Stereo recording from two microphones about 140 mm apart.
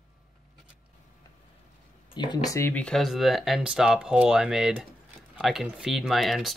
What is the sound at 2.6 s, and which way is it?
Speech, 15° left (ahead or behind).